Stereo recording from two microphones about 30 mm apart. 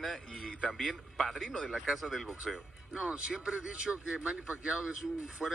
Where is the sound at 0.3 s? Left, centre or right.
Left.